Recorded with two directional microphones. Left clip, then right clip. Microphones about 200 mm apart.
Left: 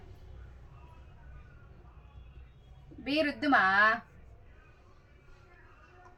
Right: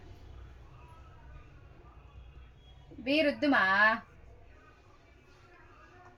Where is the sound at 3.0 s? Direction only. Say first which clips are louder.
Right 2 dB; 30° right (ahead or behind).